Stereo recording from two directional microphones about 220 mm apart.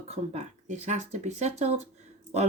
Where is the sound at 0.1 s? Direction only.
30° right (ahead or behind).